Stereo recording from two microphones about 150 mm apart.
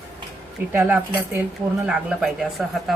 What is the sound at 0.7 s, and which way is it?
A woman's voice, 10° right (ahead or behind).